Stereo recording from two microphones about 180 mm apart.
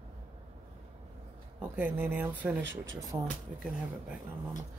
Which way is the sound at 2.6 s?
80° right.